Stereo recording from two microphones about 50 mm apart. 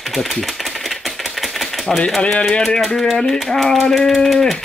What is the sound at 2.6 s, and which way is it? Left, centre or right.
Speech, centre.